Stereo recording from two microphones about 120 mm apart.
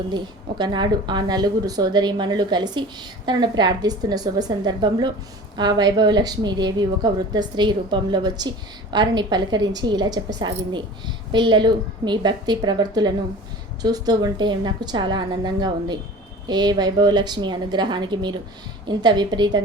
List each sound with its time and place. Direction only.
0.6 s a woman's voice: 40° right (ahead or behind)